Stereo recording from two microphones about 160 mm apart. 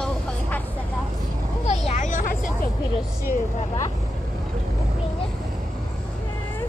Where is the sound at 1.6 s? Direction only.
45° left (ahead or behind).